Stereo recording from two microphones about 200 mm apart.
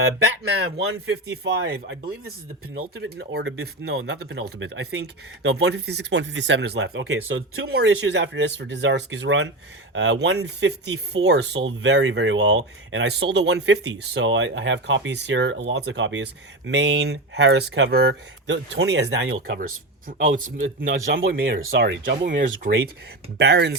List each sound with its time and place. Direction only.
1.6 s speech: 60° right (ahead or behind)
3.6 s speech: 90° right; by 7.2 s 70° right (ahead or behind)
7.3 s speech: 85° right
7.7 s speech: 60° right (ahead or behind); by 19.5 s 75° right (ahead or behind)
20.1 s speech: 40° right (ahead or behind)
20.8 s speech: 75° right (ahead or behind)
22.4 s speech: 50° right (ahead or behind)
23.4 s speech: 60° right (ahead or behind)